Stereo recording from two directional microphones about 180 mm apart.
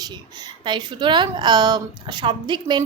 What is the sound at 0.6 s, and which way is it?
A woman's voice, 25° right (ahead or behind).